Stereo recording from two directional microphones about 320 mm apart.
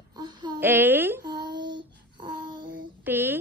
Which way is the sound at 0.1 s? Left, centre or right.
Centre.